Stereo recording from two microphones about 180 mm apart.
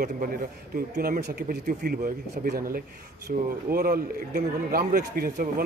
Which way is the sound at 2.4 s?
55° right (ahead or behind).